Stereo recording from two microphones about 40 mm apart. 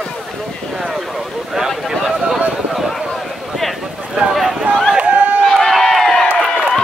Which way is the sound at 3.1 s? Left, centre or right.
Centre.